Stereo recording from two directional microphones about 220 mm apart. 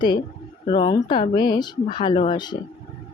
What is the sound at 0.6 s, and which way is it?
Speech, 20° left (ahead or behind).